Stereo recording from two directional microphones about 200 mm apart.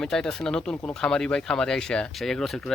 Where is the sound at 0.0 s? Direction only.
5° left (ahead or behind).